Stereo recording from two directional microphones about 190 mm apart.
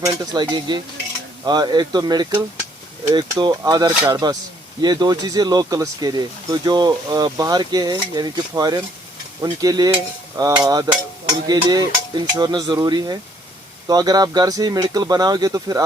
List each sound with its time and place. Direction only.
0.0 s speech: 20° right (ahead or behind)